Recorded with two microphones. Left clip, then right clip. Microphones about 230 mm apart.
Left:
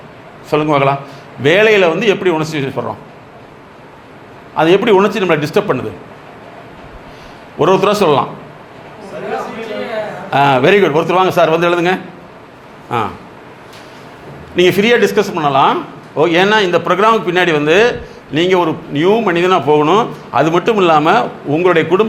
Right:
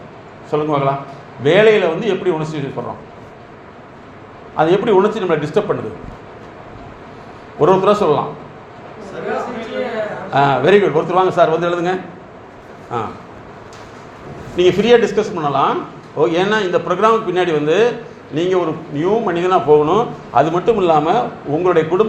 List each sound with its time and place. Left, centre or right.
0.5 s a man's voice: left
4.5 s a man's voice: left
7.6 s a man's voice: left
10.3 s a man's voice: left
14.5 s a man's voice: left